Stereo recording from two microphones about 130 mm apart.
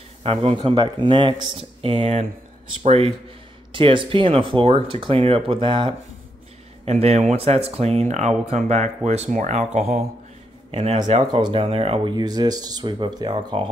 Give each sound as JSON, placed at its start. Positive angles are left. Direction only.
{"t": 0.2, "sound": "speech", "side_deg": -45}
{"t": 3.7, "sound": "speech", "side_deg": -40}
{"t": 6.8, "sound": "speech", "side_deg": -50}
{"t": 11.4, "sound": "speech", "side_deg": -45}